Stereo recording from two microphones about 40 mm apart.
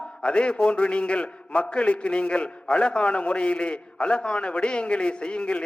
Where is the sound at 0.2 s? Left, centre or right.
Left.